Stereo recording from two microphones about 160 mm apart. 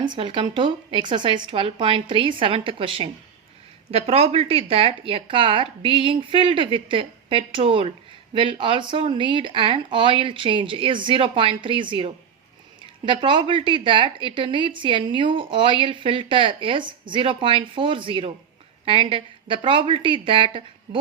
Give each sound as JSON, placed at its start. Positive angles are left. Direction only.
{"t": 0.1, "sound": "speech", "side_deg": -30}